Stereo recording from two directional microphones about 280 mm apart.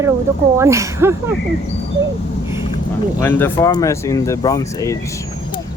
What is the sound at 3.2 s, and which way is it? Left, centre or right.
Speech, centre.